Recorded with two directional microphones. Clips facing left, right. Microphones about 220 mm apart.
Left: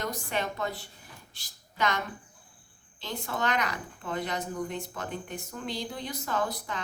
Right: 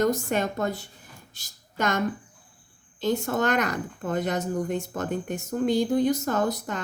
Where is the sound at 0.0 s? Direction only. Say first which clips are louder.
Right 9 dB; 45° right (ahead or behind).